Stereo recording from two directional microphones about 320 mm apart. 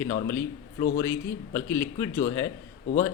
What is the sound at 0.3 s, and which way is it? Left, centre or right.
A man's voice, centre.